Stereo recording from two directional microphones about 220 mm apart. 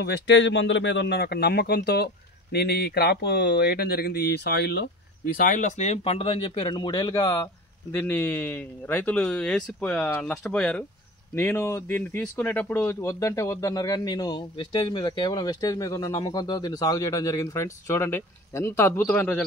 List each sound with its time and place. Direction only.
0.0 s speech: 55° left (ahead or behind); by 19.4 s 5° left (ahead or behind)